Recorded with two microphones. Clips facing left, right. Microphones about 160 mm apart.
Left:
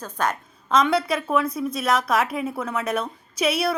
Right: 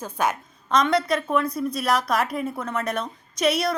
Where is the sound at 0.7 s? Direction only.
5° left (ahead or behind).